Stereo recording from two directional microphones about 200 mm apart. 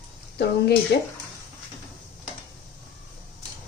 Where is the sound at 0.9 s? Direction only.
55° left (ahead or behind).